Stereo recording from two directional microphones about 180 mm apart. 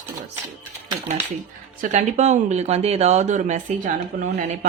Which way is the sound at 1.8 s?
40° right (ahead or behind).